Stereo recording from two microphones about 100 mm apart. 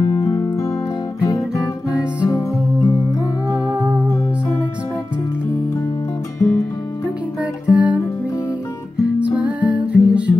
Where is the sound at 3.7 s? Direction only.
15° right (ahead or behind).